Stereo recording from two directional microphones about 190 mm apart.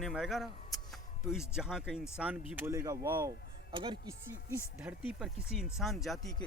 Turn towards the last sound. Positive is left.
turn(degrees=0)  # may be behind; listen again after turning